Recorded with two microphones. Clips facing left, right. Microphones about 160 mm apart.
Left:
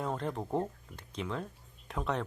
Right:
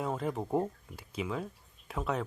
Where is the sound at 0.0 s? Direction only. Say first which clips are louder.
Right 2 dB; 5° right (ahead or behind).